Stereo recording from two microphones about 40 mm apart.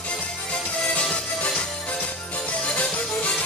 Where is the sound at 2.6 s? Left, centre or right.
Left.